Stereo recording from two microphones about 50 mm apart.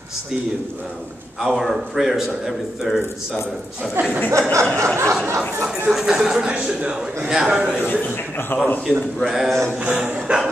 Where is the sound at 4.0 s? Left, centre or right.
Right.